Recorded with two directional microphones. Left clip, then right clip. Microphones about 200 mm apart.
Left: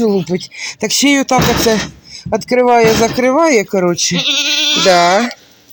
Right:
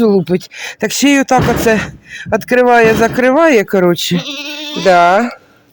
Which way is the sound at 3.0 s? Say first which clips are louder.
Right 2 dB; 5° right (ahead or behind).